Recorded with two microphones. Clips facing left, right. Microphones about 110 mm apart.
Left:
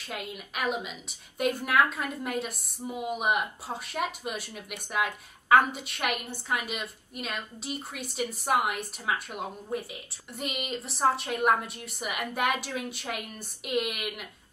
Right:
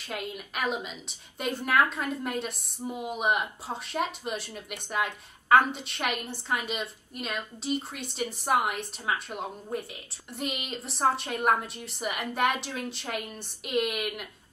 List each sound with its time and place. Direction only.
0.0 s a woman's voice: centre (ahead or behind)